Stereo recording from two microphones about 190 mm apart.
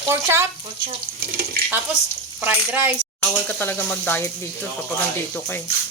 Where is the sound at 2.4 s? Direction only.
10° right (ahead or behind).